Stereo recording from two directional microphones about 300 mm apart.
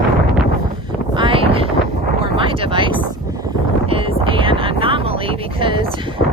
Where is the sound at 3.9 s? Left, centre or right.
Centre.